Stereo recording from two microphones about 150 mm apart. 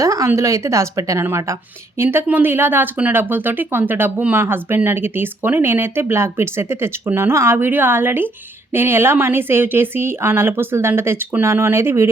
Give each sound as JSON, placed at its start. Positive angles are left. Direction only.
{"t": 0.0, "sound": "a woman's voice", "side_deg": -20}